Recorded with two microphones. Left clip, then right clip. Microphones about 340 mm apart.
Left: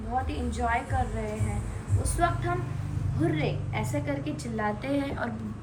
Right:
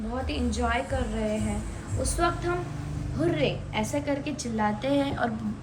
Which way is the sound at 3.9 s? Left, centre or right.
Centre.